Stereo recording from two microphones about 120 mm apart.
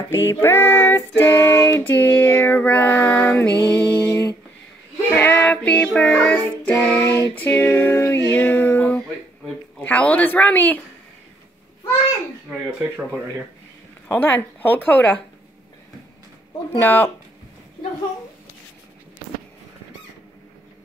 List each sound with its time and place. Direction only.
0.1 s female singing: 20° left (ahead or behind)
5.3 s music: 15° left (ahead or behind)
5.9 s child singing: 10° left (ahead or behind)
9.8 s female singing: 10° left (ahead or behind)
12.4 s speech: 10° right (ahead or behind)
14.0 s female singing: 15° left (ahead or behind)
16.8 s female singing: 15° left (ahead or behind)